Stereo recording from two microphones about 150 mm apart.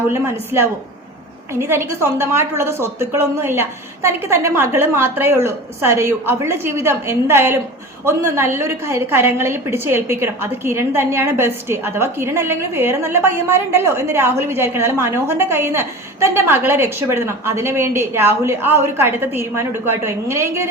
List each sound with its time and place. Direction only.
0.1 s a woman's voice: 15° right (ahead or behind)